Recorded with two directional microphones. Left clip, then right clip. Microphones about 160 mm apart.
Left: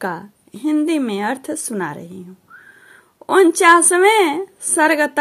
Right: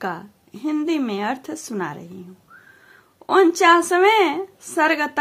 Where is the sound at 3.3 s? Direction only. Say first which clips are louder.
Left 3 dB; 25° left (ahead or behind).